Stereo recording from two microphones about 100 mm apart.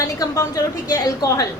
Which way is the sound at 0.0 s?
35° left (ahead or behind).